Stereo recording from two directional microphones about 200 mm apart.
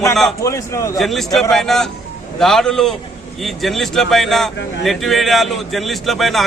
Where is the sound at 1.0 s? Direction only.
Centre (ahead or behind).